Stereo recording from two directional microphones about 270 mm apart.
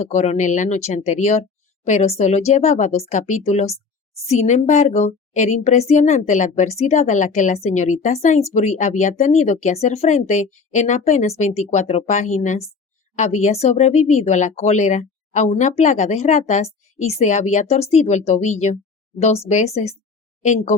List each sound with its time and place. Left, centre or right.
0.0 s a woman's voice: left